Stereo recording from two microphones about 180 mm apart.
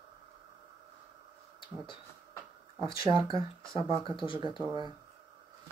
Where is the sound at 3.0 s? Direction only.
20° right (ahead or behind).